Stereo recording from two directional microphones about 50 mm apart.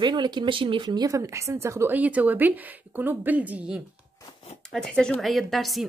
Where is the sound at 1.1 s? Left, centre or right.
Right.